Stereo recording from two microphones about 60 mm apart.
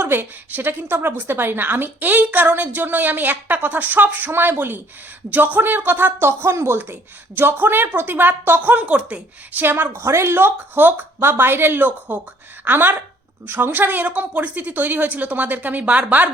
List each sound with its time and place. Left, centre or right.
0.0 s a woman's voice: right
8.7 s a woman's voice: right
9.9 s a woman's voice: right